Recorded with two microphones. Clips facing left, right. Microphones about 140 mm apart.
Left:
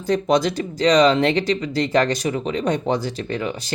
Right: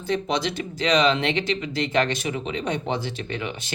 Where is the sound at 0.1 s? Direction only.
45° left (ahead or behind).